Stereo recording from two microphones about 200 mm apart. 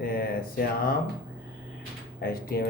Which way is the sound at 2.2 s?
50° left (ahead or behind).